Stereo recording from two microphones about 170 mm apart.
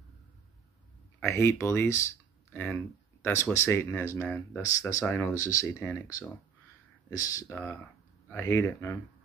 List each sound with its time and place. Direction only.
1.2 s speech: 15° left (ahead or behind)